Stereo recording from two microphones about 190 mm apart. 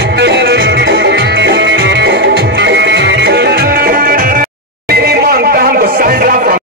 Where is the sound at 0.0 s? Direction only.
60° right (ahead or behind).